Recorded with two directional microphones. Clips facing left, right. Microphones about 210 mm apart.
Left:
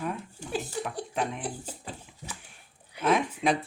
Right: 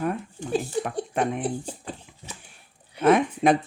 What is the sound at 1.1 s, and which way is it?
Speech, 55° right (ahead or behind).